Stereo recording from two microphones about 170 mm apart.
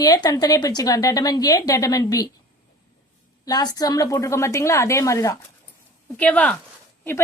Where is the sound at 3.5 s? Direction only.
20° left (ahead or behind).